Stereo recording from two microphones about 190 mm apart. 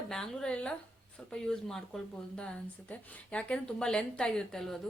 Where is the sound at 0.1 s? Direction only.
5° left (ahead or behind).